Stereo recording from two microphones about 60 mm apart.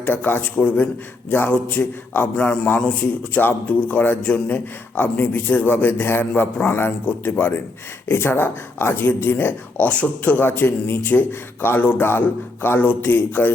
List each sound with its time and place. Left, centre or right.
0.0 s a man's voice: left
2.3 s a man's voice: centre
10.4 s speech: left